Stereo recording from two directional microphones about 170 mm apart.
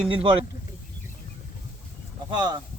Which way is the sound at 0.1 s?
30° right (ahead or behind).